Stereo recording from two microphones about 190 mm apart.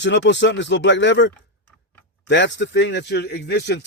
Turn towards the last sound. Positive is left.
turn(degrees=60)  # may be behind; listen again after turning